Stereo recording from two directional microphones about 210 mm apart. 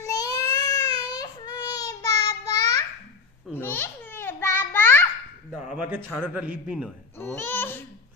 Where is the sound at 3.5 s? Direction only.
10° left (ahead or behind).